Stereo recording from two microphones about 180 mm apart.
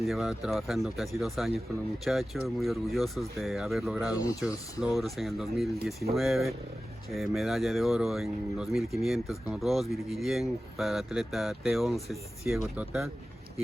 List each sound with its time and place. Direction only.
0.1 s speech: centre (ahead or behind)
4.1 s speech: 20° left (ahead or behind)
4.9 s speech: centre (ahead or behind)